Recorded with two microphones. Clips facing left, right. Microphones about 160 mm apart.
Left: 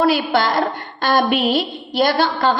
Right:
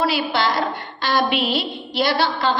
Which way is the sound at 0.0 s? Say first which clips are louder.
Left 4 dB; 50° left (ahead or behind).